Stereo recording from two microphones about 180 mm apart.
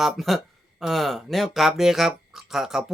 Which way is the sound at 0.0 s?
Centre (ahead or behind).